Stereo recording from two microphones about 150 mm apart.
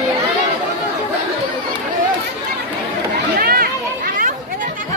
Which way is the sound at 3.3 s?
85° right.